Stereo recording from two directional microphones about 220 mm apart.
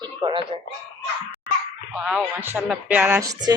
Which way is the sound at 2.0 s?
5° right (ahead or behind).